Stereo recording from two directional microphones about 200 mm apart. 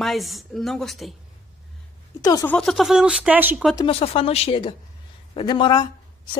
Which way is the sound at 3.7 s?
25° left (ahead or behind).